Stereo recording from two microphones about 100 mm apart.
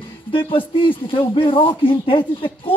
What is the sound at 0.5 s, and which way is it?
Speech, 60° left (ahead or behind).